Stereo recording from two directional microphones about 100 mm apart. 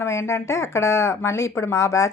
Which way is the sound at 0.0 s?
25° left (ahead or behind).